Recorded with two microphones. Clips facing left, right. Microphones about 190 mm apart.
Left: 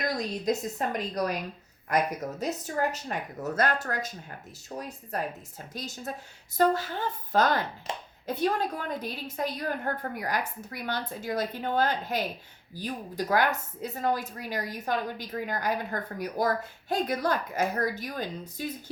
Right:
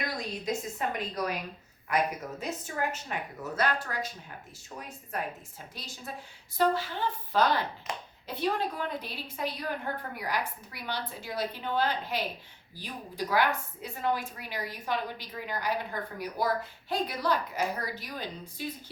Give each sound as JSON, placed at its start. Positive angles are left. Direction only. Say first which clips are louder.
{"t": 0.2, "sound": "a woman's voice", "louder": "left 5 dB", "side_deg": 40}
{"t": 2.4, "sound": "a woman's voice", "louder": "left 4 dB", "side_deg": 40}
{"t": 7.9, "sound": "a child's voice", "louder": "left 2 dB", "side_deg": 25}
{"t": 8.3, "sound": "a woman's voice", "louder": "left 3 dB", "side_deg": 45}